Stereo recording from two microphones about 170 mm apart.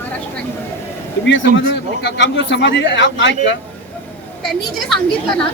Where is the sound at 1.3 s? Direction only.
90° left.